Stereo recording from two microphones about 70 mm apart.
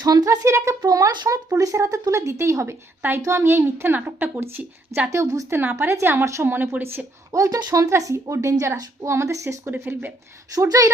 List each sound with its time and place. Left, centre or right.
0.0 s speech: right
0.3 s a woman's voice: right
0.8 s a child's voice: right
1.5 s a woman's voice: right
5.5 s a woman's voice: right
6.8 s speech: right
7.3 s a woman's voice: right
7.9 s a woman's voice: right
10.5 s a woman's voice: right